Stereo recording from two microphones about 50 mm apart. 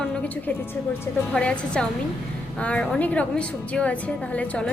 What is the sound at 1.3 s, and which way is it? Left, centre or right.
A woman's voice, left.